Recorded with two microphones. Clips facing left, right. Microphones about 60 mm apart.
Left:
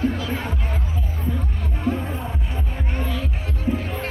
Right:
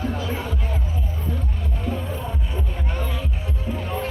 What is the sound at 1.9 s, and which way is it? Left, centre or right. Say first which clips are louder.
Music: left 1 dB; left.